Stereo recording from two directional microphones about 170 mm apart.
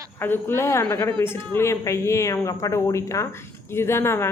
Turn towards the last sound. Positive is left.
turn(degrees=15)  # may be behind; listen again after turning